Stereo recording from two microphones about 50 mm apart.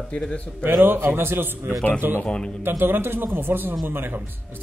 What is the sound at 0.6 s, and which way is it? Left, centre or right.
A man's voice, right.